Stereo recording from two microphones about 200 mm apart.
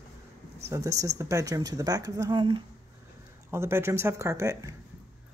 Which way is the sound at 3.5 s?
10° right (ahead or behind).